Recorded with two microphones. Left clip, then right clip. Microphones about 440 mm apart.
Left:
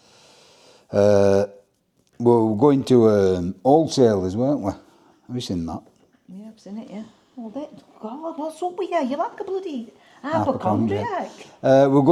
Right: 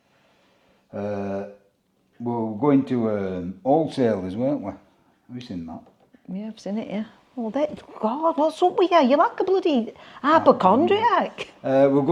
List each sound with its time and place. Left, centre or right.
0.9 s a sound: left
2.2 s speech: left
5.3 s speech: left
6.3 s speech: centre
7.5 s speech: right
11.6 s speech: left